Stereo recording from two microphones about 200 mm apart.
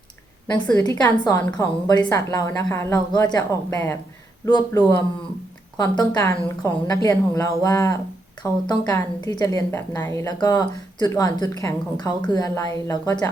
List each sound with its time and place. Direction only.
0.7 s a woman's voice: 20° left (ahead or behind)